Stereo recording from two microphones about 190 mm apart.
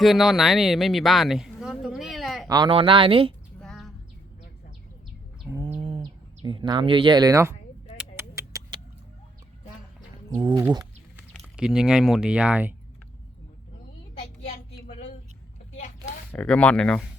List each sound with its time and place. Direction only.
0.0 s speech: centre (ahead or behind)
2.5 s speech: 25° right (ahead or behind)
3.6 s a sound: centre (ahead or behind)
5.5 s bird: 5° right (ahead or behind)
5.8 s speech: 25° right (ahead or behind)
7.9 s a sound: 15° right (ahead or behind)
10.3 s speech: 20° right (ahead or behind)
11.5 s speech: 5° right (ahead or behind)
14.2 s a sound: 40° left (ahead or behind)
16.3 s speech: 5° left (ahead or behind)